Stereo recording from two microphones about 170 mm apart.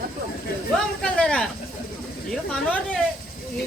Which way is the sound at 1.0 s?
5° left (ahead or behind).